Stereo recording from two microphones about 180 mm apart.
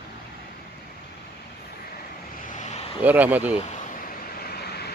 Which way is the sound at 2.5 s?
40° left (ahead or behind).